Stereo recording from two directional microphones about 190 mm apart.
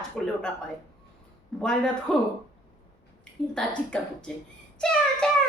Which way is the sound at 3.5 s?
5° left (ahead or behind).